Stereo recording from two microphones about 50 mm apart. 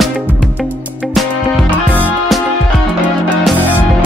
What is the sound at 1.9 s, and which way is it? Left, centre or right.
Music, left.